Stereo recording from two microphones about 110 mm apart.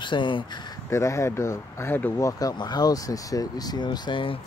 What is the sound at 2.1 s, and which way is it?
Speech, 30° left (ahead or behind).